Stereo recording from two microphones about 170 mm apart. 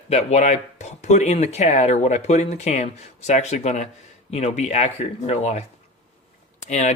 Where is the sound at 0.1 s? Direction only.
40° left (ahead or behind).